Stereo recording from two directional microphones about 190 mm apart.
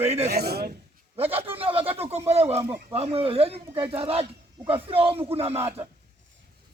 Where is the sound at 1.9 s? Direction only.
30° right (ahead or behind).